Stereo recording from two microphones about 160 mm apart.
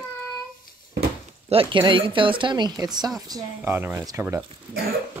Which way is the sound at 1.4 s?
35° right (ahead or behind).